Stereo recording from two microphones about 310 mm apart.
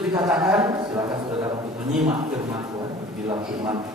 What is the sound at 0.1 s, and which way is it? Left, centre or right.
Speech, centre.